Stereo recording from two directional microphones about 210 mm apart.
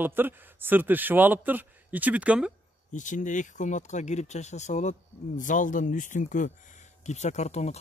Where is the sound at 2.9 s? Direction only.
35° left (ahead or behind).